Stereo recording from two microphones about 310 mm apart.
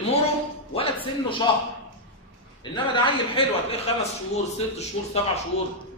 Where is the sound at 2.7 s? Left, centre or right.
Centre.